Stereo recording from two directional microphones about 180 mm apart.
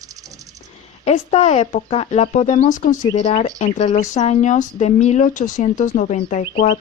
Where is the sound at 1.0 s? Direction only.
35° left (ahead or behind).